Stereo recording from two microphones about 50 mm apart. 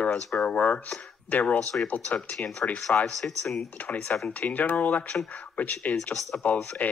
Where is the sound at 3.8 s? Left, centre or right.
Left.